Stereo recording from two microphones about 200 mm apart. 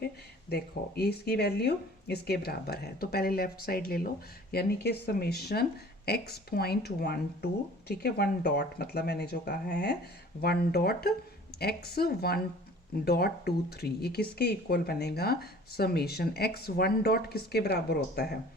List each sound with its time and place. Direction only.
0.5 s speech: 50° left (ahead or behind)